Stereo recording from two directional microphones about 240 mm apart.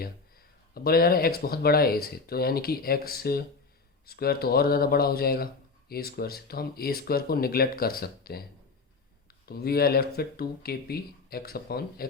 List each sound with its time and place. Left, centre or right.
0.7 s speech: left
9.5 s speech: left